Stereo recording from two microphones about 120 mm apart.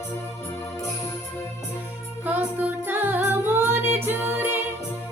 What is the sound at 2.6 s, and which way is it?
Music, 15° right (ahead or behind).